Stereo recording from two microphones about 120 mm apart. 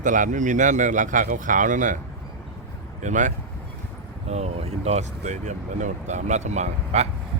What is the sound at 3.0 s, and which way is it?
Speech, 90° right.